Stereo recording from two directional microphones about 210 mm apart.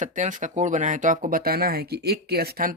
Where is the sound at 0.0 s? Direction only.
35° right (ahead or behind).